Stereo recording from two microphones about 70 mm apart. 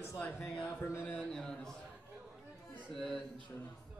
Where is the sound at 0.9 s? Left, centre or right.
Left.